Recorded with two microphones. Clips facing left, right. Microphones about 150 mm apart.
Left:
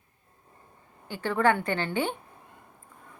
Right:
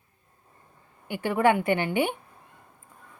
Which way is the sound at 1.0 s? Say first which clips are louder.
Right 2 dB; 15° right (ahead or behind).